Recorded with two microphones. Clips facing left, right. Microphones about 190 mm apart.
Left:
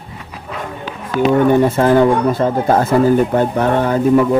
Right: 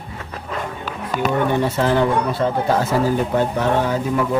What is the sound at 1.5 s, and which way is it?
Speech, 50° left (ahead or behind).